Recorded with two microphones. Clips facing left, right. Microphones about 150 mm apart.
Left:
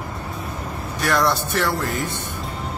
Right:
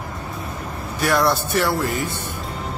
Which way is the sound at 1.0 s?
5° right (ahead or behind).